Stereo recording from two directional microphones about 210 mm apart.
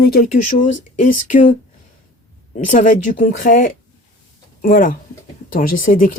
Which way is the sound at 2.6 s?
40° left (ahead or behind).